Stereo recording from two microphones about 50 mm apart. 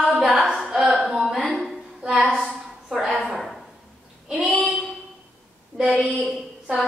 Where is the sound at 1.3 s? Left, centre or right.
Centre.